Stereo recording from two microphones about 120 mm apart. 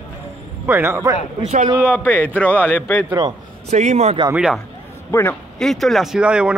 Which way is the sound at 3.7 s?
70° right (ahead or behind).